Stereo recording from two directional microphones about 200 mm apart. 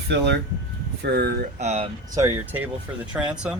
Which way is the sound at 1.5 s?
30° right (ahead or behind).